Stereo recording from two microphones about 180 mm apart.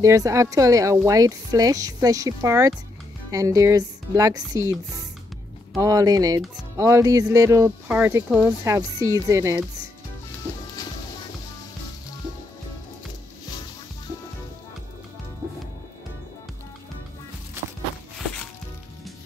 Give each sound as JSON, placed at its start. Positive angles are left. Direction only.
{"t": 0.0, "sound": "speech", "side_deg": -15}
{"t": 5.8, "sound": "speech", "side_deg": -20}